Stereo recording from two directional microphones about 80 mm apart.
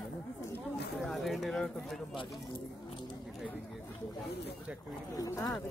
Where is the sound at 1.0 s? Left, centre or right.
Centre.